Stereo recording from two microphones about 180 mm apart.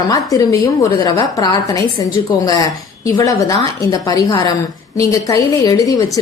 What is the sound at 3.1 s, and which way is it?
A woman's voice, 20° left (ahead or behind).